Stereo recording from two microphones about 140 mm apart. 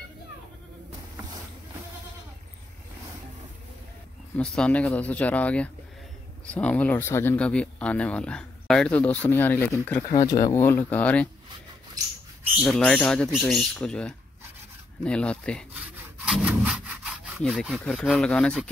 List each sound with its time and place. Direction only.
4.4 s speech: 10° left (ahead or behind)
10.0 s speech: 25° left (ahead or behind); by 11.2 s 10° left (ahead or behind)
12.6 s speech: 5° left (ahead or behind)
16.3 s rub: 5° right (ahead or behind)
17.4 s speech: centre (ahead or behind)